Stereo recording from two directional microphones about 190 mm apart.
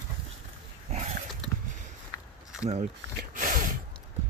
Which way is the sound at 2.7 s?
45° right (ahead or behind).